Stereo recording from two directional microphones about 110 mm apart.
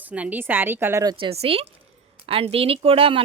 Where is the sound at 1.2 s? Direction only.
60° right (ahead or behind).